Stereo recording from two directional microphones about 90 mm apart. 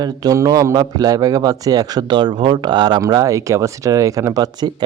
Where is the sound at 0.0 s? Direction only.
45° right (ahead or behind).